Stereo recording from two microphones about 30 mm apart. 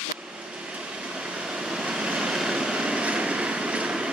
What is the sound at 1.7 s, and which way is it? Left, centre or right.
Vehicle, right.